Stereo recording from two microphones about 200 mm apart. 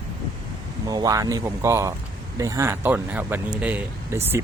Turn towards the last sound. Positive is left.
turn(degrees=-10)  # may be behind; listen again after turning